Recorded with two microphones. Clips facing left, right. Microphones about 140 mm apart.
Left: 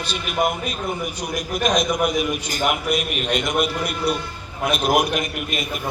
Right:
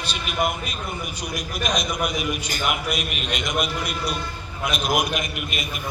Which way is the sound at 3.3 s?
55° left (ahead or behind).